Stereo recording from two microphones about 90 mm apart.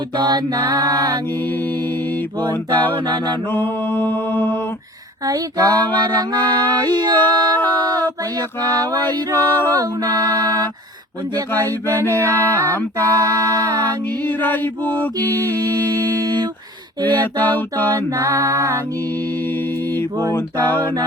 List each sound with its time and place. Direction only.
0.2 s mantra: 55° right (ahead or behind)
0.5 s music: 40° right (ahead or behind)
3.5 s mantra: 20° left (ahead or behind)
5.2 s mantra: 40° right (ahead or behind)
9.1 s music: 40° right (ahead or behind)
11.5 s mantra: 25° left (ahead or behind)
13.3 s mantra: 45° right (ahead or behind)
14.3 s mantra: 20° left (ahead or behind)
17.9 s music: 35° right (ahead or behind)
20.3 s mantra: 25° left (ahead or behind)